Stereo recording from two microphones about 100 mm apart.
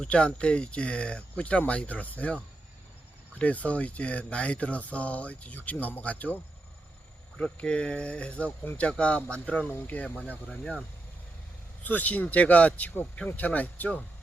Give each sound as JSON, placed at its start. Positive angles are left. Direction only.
{"t": 0.0, "sound": "speech", "side_deg": 10}
{"t": 3.3, "sound": "speech", "side_deg": 15}
{"t": 7.3, "sound": "speech", "side_deg": 10}